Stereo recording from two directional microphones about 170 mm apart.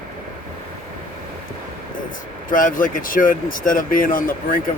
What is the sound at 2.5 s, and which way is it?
Speech, 55° left (ahead or behind).